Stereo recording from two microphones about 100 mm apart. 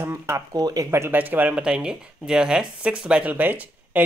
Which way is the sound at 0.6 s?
40° right (ahead or behind).